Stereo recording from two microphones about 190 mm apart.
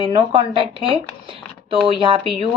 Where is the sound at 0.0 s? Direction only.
25° right (ahead or behind).